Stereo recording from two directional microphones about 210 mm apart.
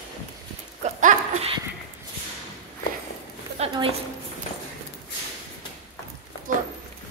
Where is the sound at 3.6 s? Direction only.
25° right (ahead or behind).